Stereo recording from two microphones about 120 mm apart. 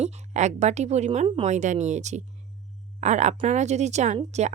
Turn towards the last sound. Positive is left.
turn(degrees=-70)  # may be behind; listen again after turning